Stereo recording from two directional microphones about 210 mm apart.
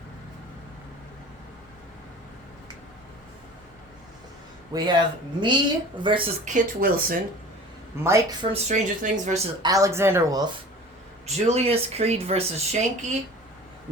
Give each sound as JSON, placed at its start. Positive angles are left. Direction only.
{"t": 4.7, "sound": "speech", "side_deg": -20}
{"t": 6.4, "sound": "speech", "side_deg": -40}
{"t": 8.0, "sound": "speech", "side_deg": -15}
{"t": 8.5, "sound": "speech", "side_deg": -35}
{"t": 9.6, "sound": "speech", "side_deg": -15}
{"t": 11.3, "sound": "speech", "side_deg": -30}